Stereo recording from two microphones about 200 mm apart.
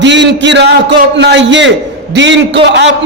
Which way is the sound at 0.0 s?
60° right (ahead or behind).